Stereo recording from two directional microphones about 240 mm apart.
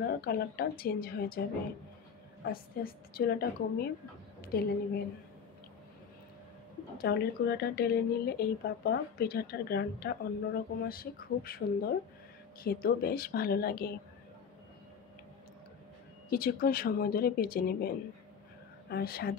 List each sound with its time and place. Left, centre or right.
0.0 s speech: left
2.4 s speech: left
4.4 s a sound: left
7.0 s speech: left
16.3 s speech: left